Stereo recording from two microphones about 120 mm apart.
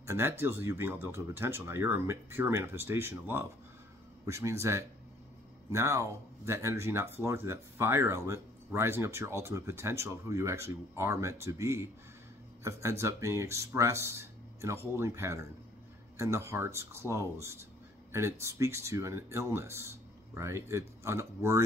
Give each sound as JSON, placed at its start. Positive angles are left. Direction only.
{"t": 0.0, "sound": "speech", "side_deg": -20}